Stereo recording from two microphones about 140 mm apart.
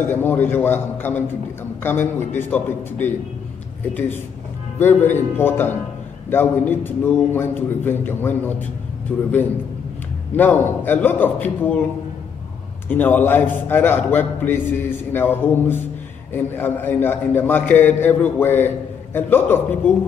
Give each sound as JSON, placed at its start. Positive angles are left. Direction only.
{"t": 0.1, "sound": "a man's voice", "side_deg": 15}
{"t": 4.7, "sound": "a man's voice", "side_deg": 15}
{"t": 10.3, "sound": "a man's voice", "side_deg": 15}
{"t": 12.8, "sound": "a man's voice", "side_deg": 15}